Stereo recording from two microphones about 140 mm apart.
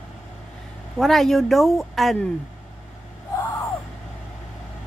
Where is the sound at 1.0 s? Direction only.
Centre (ahead or behind).